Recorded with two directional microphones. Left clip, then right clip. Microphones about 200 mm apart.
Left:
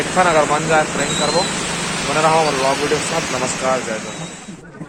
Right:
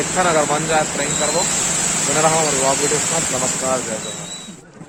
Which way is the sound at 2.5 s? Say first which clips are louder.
Left 1 dB; 55° right (ahead or behind).